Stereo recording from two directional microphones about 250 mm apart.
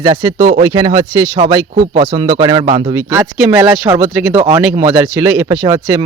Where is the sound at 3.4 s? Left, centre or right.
Centre.